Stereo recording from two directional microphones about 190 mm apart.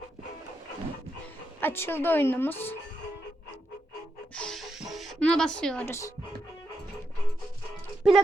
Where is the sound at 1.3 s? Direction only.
10° left (ahead or behind).